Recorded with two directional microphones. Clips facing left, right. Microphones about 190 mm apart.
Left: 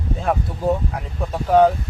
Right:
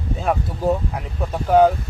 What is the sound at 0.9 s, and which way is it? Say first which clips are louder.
Speech: even; 5° right (ahead or behind).